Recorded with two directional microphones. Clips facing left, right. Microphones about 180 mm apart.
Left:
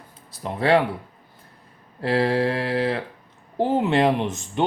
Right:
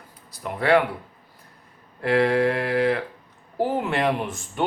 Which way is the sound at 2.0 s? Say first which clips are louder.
Right 1 dB; 30° left (ahead or behind).